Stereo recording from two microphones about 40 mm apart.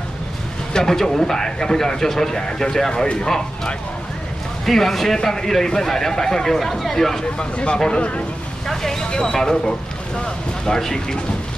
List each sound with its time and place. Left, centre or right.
0.7 s speech: centre
4.6 s speech: centre
7.3 s speech: left
8.6 s speech: centre